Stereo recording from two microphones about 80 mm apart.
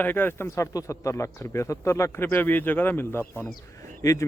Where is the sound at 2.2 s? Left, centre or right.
Left.